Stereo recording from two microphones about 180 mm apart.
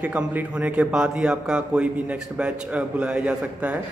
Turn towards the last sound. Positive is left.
turn(degrees=-5)  # may be behind; listen again after turning